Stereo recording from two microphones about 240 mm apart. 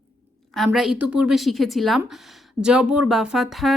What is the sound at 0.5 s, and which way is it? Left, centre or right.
A woman's voice, centre.